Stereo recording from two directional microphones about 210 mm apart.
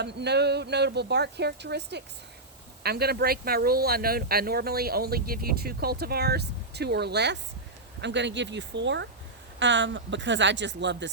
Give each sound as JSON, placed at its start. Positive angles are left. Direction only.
{"t": 0.0, "sound": "speech", "side_deg": -55}